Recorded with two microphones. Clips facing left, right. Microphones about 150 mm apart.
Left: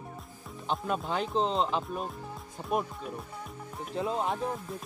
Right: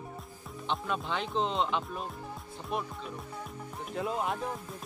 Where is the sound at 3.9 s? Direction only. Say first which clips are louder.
Left 2 dB; 30° left (ahead or behind).